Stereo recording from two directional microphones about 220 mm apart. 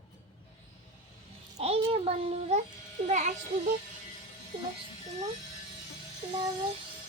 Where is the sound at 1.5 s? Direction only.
25° right (ahead or behind).